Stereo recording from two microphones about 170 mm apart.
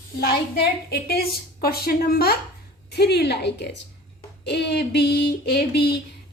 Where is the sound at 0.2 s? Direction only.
65° left (ahead or behind).